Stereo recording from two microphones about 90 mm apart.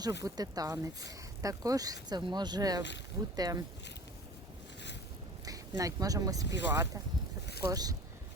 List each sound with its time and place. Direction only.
0.0 s speech: 45° right (ahead or behind)
5.5 s speech: 40° right (ahead or behind)